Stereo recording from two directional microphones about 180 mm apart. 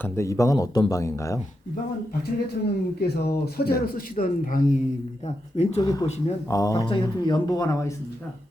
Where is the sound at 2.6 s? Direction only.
65° left (ahead or behind); by 4.8 s 45° left (ahead or behind).